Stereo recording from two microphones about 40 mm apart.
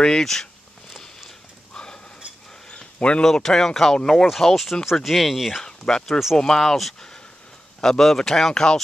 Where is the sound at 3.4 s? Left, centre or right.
Centre.